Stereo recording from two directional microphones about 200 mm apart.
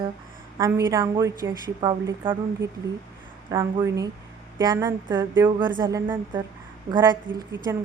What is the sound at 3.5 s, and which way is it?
Speech, 15° right (ahead or behind).